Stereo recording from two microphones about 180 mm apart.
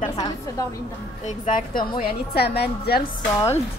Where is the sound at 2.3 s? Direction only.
65° left (ahead or behind).